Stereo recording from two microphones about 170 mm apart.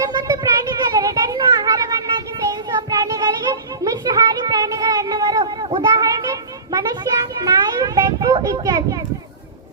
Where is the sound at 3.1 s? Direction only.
20° right (ahead or behind).